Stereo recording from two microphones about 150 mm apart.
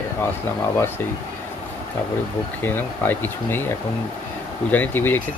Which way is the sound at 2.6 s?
15° left (ahead or behind).